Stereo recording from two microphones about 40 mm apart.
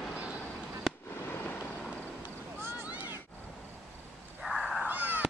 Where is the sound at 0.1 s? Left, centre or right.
Right.